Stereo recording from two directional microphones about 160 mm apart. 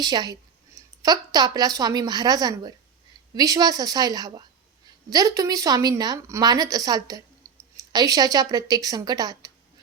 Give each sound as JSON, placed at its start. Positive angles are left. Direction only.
{"t": 0.0, "sound": "a woman's voice", "side_deg": -25}